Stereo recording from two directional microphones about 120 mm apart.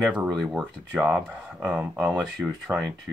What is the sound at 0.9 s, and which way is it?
Speech, 10° right (ahead or behind).